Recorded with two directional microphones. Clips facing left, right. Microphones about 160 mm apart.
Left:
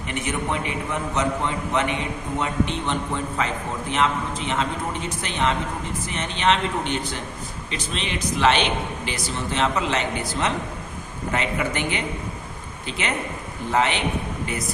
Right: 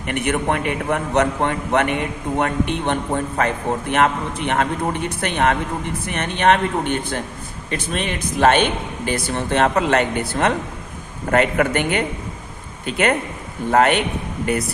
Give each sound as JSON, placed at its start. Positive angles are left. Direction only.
{"t": 0.1, "sound": "a man's voice", "side_deg": -60}